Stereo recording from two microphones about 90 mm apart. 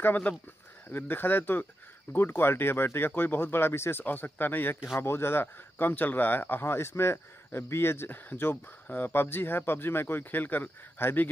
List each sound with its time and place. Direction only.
0.0 s speech: 20° left (ahead or behind)